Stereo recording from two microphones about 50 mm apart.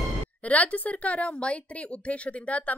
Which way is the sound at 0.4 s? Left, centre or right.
Left.